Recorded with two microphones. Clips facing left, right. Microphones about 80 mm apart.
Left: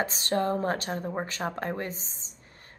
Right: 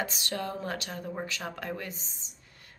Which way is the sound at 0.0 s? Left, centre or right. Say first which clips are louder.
Left 6 dB; left.